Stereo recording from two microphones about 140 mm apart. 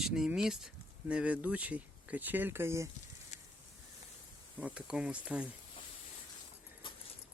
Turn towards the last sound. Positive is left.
turn(degrees=-10)  # may be behind; listen again after turning